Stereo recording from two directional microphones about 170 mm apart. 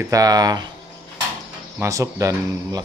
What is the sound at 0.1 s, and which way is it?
Speech, 20° right (ahead or behind).